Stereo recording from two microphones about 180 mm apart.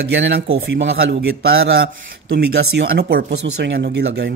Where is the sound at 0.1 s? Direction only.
90° right.